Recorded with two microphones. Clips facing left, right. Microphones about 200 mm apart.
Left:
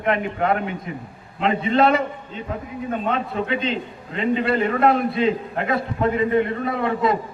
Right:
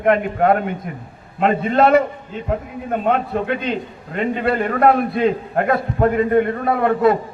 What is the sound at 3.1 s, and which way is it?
A man's voice, 50° right (ahead or behind).